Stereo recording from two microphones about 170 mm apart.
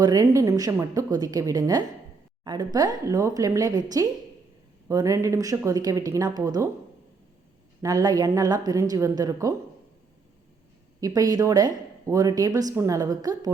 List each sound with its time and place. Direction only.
0.0 s speech: 20° right (ahead or behind)
7.8 s speech: 20° right (ahead or behind)
11.0 s speech: 20° right (ahead or behind)